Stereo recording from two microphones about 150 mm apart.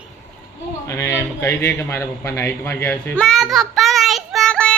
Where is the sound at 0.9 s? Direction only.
20° left (ahead or behind).